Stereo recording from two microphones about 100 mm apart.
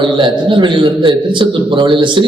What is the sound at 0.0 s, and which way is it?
A man's voice, 55° right (ahead or behind).